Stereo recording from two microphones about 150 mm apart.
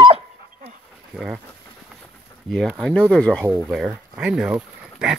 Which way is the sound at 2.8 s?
5° left (ahead or behind).